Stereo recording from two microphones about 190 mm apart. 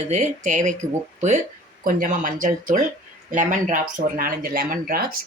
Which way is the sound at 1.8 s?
45° right (ahead or behind).